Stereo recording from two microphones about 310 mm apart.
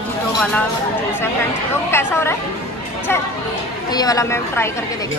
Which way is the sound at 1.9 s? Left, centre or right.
Centre.